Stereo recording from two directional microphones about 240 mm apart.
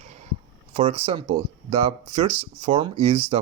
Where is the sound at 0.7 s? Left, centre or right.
Right.